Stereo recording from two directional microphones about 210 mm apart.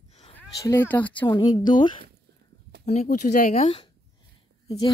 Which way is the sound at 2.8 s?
35° left (ahead or behind).